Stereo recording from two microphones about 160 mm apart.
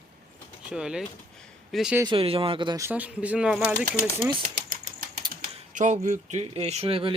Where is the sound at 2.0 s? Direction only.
35° right (ahead or behind).